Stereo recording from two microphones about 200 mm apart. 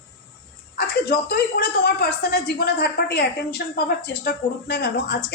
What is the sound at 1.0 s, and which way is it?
A woman's voice, 50° left (ahead or behind).